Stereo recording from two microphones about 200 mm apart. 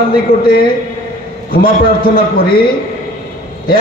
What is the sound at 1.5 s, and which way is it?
A man's voice, 45° left (ahead or behind).